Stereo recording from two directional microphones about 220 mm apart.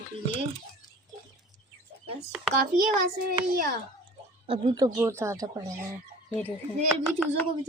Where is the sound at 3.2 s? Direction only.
40° right (ahead or behind).